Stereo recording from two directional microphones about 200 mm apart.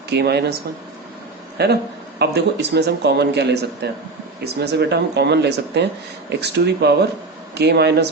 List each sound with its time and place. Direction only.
0.1 s speech: 55° right (ahead or behind)
1.5 s speech: 55° right (ahead or behind)